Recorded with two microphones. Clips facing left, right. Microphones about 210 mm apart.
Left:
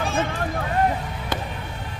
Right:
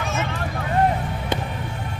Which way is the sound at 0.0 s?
30° left (ahead or behind).